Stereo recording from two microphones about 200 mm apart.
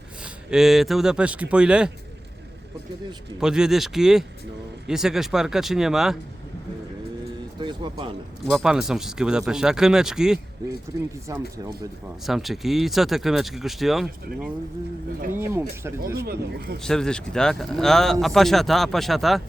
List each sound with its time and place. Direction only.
0.2 s speech: centre (ahead or behind)
3.4 s speech: 5° right (ahead or behind)
7.6 s speech: 25° right (ahead or behind)
8.4 s speech: centre (ahead or behind)
11.3 s speech: 15° right (ahead or behind)
12.2 s speech: centre (ahead or behind)
15.3 s speech: 15° right (ahead or behind)
16.1 s speech: 50° right (ahead or behind)
16.8 s speech: 5° left (ahead or behind)